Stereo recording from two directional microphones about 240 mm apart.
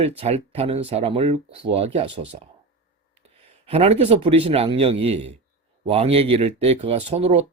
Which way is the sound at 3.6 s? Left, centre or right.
Right.